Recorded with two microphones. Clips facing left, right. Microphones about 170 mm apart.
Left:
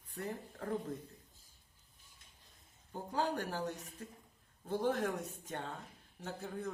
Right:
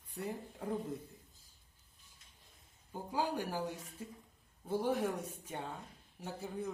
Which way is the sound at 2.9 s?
10° right (ahead or behind).